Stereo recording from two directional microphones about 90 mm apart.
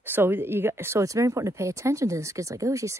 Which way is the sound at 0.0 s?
25° right (ahead or behind).